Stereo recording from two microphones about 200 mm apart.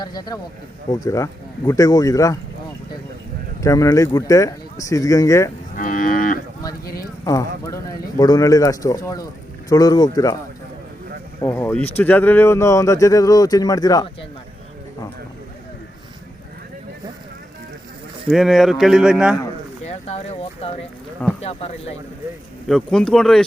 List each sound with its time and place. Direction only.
0.0 s speech: 20° left (ahead or behind)
3.6 s speech: 15° left (ahead or behind)
5.7 s moo: 40° left (ahead or behind)
6.8 s a sound: 50° left (ahead or behind)
7.3 s speech: 15° left (ahead or behind)
11.3 s speech: 10° left (ahead or behind)
18.3 s speech: centre (ahead or behind)
19.8 s a sound: 30° left (ahead or behind)
21.4 s speech: 30° left (ahead or behind)
22.7 s speech: 5° left (ahead or behind)